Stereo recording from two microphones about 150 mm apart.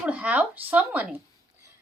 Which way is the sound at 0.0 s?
10° right (ahead or behind).